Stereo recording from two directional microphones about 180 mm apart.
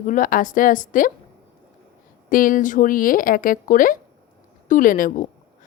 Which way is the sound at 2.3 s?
50° left (ahead or behind).